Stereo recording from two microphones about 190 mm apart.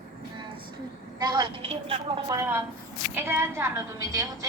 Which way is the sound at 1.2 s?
25° right (ahead or behind).